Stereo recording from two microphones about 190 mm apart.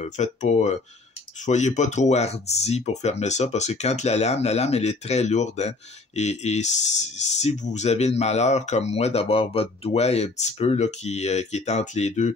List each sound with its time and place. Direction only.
0.0 s speech: 35° left (ahead or behind)